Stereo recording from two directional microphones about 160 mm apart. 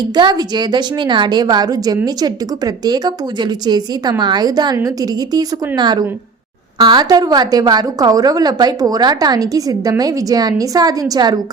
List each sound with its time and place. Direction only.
0.2 s a woman's voice: 25° right (ahead or behind)